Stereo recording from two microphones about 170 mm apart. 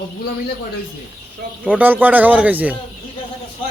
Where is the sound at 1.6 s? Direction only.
10° right (ahead or behind).